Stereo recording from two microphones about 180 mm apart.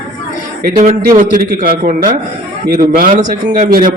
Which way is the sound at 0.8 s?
45° right (ahead or behind).